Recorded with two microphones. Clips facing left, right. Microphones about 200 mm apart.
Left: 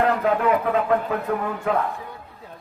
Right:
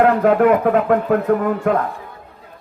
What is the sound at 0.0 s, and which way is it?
Speech, 60° right (ahead or behind).